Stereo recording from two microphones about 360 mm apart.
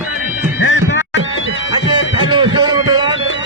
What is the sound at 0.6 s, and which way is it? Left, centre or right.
Music, left.